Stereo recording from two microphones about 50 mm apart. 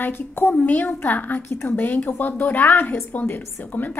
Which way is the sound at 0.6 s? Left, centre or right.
Left.